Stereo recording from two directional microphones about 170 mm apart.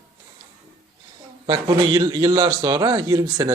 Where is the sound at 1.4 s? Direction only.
25° right (ahead or behind).